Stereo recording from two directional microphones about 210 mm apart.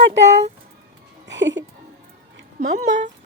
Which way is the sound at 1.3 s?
60° right (ahead or behind).